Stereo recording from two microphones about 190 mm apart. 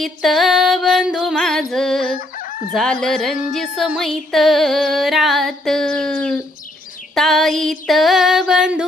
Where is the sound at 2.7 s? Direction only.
5° left (ahead or behind).